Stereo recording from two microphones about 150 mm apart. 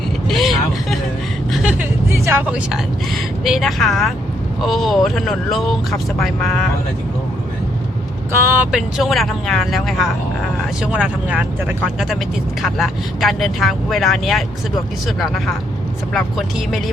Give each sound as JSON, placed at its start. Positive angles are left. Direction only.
{"t": 0.3, "sound": "vehicle", "side_deg": 0}
{"t": 1.6, "sound": "vehicle", "side_deg": -10}
{"t": 3.4, "sound": "speech", "side_deg": 0}
{"t": 8.3, "sound": "speech", "side_deg": -15}
{"t": 8.7, "sound": "speech", "side_deg": 0}
{"t": 12.6, "sound": "speech", "side_deg": 0}